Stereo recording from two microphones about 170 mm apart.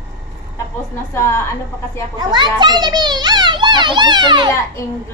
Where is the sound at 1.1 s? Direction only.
15° left (ahead or behind).